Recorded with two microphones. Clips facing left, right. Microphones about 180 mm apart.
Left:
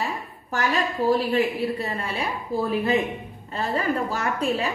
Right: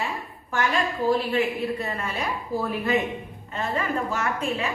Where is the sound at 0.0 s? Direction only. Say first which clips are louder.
Left 1 dB; 40° left (ahead or behind).